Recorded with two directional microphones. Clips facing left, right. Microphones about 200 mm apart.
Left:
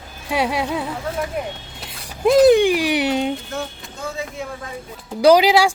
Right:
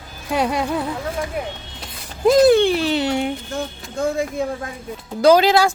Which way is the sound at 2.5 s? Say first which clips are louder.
Left 1 dB; 10° left (ahead or behind).